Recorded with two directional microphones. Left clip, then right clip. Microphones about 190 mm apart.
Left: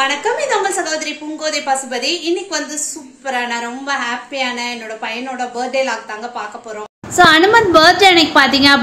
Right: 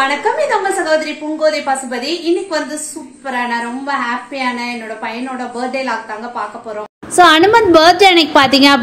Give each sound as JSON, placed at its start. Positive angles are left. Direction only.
{"t": 0.0, "sound": "a woman's voice", "side_deg": 5}
{"t": 7.2, "sound": "a woman's voice", "side_deg": -20}